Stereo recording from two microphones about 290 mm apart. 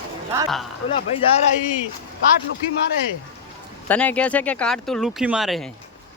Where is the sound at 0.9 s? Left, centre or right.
Centre.